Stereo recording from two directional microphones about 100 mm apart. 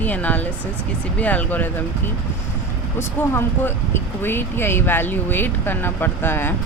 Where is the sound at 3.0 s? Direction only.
25° left (ahead or behind).